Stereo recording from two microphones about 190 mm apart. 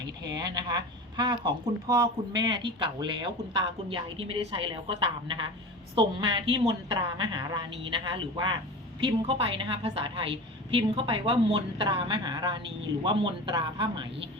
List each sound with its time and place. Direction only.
0.3 s speech: 20° right (ahead or behind)